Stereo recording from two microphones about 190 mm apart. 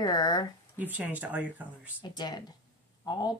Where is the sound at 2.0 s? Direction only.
20° left (ahead or behind).